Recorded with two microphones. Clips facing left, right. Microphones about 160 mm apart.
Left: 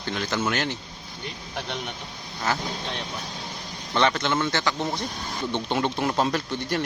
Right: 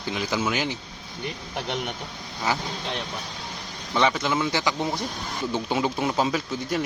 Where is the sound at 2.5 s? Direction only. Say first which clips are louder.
Even; 15° right (ahead or behind).